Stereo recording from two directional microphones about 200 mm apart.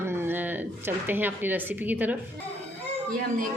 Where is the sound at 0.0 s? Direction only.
10° right (ahead or behind).